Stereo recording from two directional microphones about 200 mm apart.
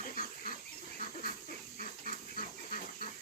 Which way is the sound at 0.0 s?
45° left (ahead or behind).